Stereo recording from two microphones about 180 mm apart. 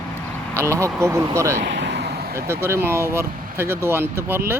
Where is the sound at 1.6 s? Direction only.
70° right (ahead or behind).